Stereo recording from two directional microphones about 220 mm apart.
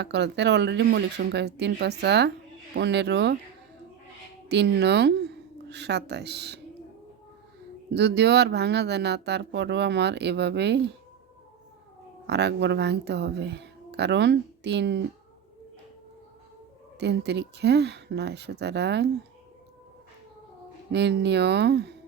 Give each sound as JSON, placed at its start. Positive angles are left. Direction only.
{"t": 0.0, "sound": "speech", "side_deg": -50}
{"t": 4.4, "sound": "speech", "side_deg": -50}
{"t": 7.9, "sound": "speech", "side_deg": -50}
{"t": 12.3, "sound": "speech", "side_deg": -50}
{"t": 17.0, "sound": "speech", "side_deg": -50}
{"t": 20.9, "sound": "speech", "side_deg": -50}